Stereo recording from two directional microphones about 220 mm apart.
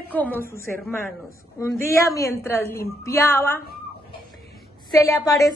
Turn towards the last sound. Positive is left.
turn(degrees=15)  # may be behind; listen again after turning